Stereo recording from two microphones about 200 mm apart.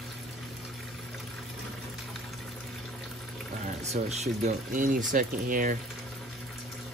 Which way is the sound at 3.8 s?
35° right (ahead or behind).